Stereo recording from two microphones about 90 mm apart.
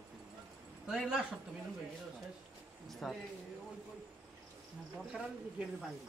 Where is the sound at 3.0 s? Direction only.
Centre (ahead or behind).